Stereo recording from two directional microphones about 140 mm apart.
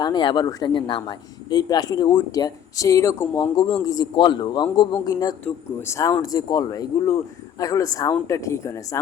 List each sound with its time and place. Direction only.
0.0 s a man's voice: 35° left (ahead or behind)